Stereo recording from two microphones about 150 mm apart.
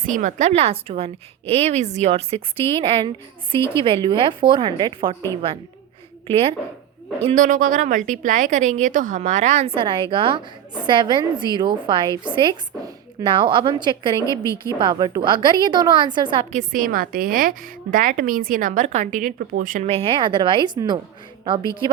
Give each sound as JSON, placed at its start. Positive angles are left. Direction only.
{"t": 0.0, "sound": "a woman's voice", "side_deg": -60}
{"t": 7.2, "sound": "speech", "side_deg": -40}
{"t": 7.4, "sound": "a woman's voice", "side_deg": -60}
{"t": 14.2, "sound": "a woman's voice", "side_deg": 20}
{"t": 14.8, "sound": "a woman's voice", "side_deg": -25}
{"t": 16.5, "sound": "a woman's voice", "side_deg": -60}
{"t": 19.9, "sound": "speech", "side_deg": -35}